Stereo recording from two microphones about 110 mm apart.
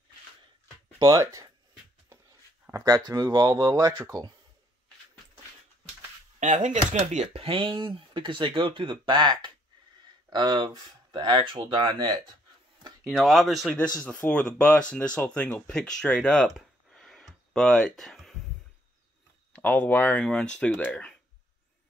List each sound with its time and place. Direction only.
0.9 s speech: 35° right (ahead or behind)
2.7 s speech: 30° right (ahead or behind)
6.5 s speech: 90° right
7.4 s speech: 55° right (ahead or behind); by 12.1 s 40° right (ahead or behind)
13.0 s speech: centre (ahead or behind)
14.0 s speech: 10° left (ahead or behind)
16.4 s a sound: 5° left (ahead or behind)
19.5 s speech: 15° left (ahead or behind)